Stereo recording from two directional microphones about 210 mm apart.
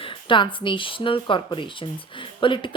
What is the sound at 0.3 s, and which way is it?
A woman's voice, 25° left (ahead or behind).